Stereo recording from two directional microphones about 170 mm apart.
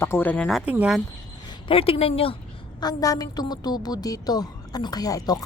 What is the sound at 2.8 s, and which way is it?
Speech, 20° left (ahead or behind).